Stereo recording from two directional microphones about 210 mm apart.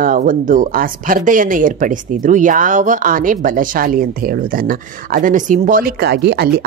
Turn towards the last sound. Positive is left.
turn(degrees=-50)  # may be behind; listen again after turning